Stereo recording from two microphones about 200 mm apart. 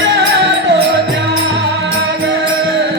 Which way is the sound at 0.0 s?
60° right (ahead or behind).